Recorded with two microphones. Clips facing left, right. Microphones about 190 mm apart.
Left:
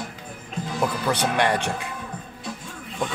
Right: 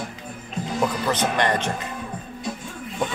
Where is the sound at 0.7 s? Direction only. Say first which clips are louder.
Right 1 dB; 5° left (ahead or behind).